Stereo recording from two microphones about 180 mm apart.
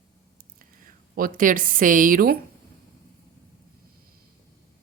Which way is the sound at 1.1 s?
50° right (ahead or behind).